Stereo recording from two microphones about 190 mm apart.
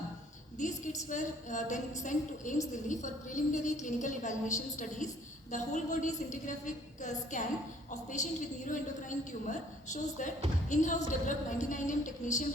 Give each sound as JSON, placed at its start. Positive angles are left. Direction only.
{"t": 0.6, "sound": "a woman's voice", "side_deg": 40}